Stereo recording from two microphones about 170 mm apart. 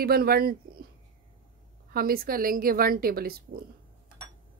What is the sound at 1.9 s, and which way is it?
Speech, 60° right (ahead or behind).